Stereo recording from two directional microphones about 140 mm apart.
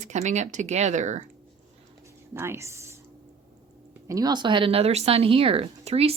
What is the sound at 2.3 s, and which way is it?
Speech, 20° right (ahead or behind).